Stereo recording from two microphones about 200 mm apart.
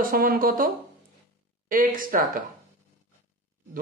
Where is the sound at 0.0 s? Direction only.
45° right (ahead or behind).